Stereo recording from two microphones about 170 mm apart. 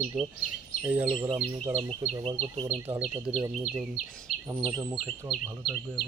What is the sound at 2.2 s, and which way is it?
Speech, 35° right (ahead or behind).